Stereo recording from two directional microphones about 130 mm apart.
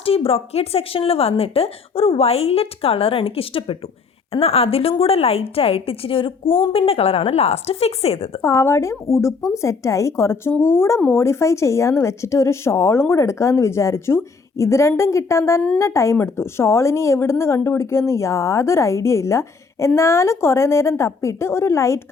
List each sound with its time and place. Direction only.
0.0 s a woman's voice: 45° left (ahead or behind)
8.4 s speech: 20° left (ahead or behind)